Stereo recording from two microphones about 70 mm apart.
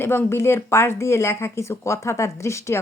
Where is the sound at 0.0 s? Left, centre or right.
Left.